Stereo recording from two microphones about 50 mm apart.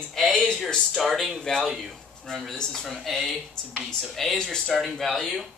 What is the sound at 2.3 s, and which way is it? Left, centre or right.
Speech, centre.